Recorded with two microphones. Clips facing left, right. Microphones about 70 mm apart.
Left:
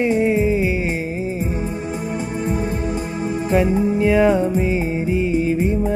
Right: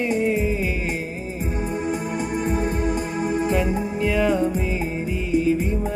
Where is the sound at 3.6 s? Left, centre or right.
Left.